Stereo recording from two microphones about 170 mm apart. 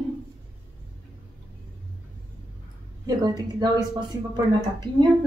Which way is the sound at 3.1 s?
25° right (ahead or behind).